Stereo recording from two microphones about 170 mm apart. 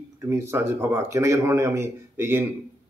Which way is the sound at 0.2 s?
15° right (ahead or behind).